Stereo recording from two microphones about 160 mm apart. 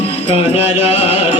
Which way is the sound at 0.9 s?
40° left (ahead or behind).